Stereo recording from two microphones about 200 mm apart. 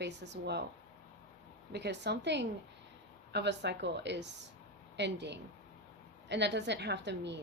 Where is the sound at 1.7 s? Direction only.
55° right (ahead or behind).